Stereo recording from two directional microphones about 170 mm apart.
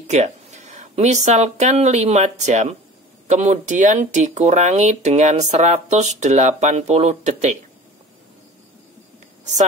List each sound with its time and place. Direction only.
0.1 s speech: 45° right (ahead or behind)
9.4 s speech: 45° right (ahead or behind)